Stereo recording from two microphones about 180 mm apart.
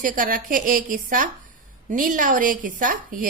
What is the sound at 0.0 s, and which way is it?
A woman's voice, 50° right (ahead or behind).